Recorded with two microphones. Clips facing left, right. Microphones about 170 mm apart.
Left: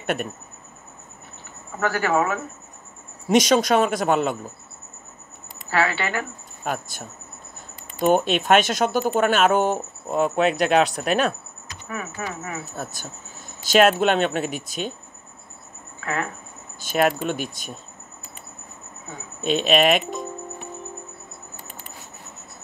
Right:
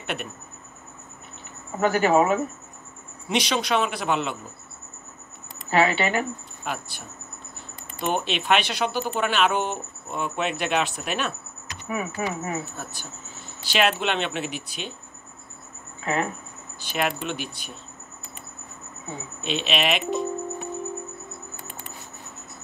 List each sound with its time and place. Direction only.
0.0 s speech: 45° left (ahead or behind)
1.8 s speech: 20° right (ahead or behind)
3.3 s speech: 45° left (ahead or behind)
5.7 s speech: 20° right (ahead or behind)
6.6 s speech: 45° left (ahead or behind)
11.9 s speech: 15° right (ahead or behind)
13.6 s speech: 45° left (ahead or behind)
16.0 s speech: 20° right (ahead or behind)
16.8 s speech: 45° left (ahead or behind)
19.4 s speech: 45° left (ahead or behind)